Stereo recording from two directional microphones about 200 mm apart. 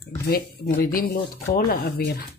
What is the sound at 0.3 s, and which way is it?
Speech, 50° left (ahead or behind).